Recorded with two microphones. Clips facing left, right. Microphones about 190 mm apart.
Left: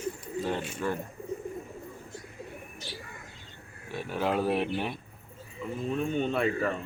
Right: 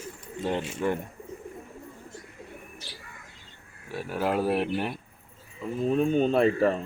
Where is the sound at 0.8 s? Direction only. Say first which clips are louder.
Right 4 dB; 15° right (ahead or behind).